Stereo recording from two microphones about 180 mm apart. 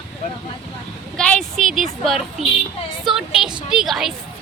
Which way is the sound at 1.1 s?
5° left (ahead or behind).